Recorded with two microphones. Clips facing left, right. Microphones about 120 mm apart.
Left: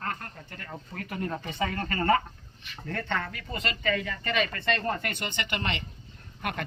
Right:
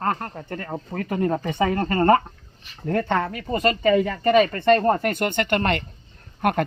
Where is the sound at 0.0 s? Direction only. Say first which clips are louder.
Right 10 dB; 50° right (ahead or behind).